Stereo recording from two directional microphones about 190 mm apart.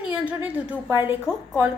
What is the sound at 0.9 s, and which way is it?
Speech, 25° left (ahead or behind).